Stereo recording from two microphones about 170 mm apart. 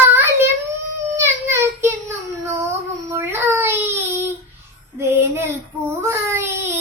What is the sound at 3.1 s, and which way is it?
Baby cry, 15° right (ahead or behind).